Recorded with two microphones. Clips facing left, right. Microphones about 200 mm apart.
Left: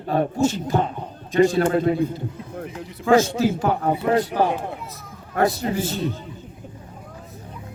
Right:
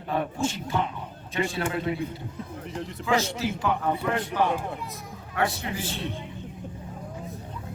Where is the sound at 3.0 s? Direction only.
50° left (ahead or behind).